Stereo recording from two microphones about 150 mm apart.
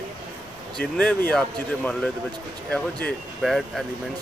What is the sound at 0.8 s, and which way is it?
Speech, 10° left (ahead or behind).